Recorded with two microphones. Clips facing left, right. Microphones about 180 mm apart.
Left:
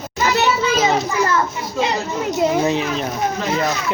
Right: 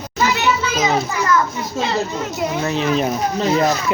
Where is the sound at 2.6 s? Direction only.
20° left (ahead or behind).